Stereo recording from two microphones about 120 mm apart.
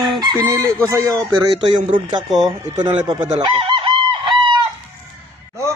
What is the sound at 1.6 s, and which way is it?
Speech, 45° right (ahead or behind).